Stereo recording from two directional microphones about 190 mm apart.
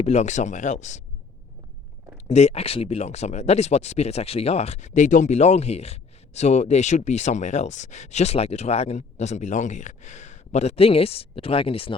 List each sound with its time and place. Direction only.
0.0 s speech: 35° left (ahead or behind)
2.1 s speech: 35° left (ahead or behind)